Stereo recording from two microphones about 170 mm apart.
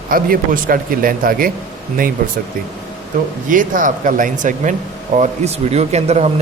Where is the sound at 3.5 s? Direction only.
50° right (ahead or behind).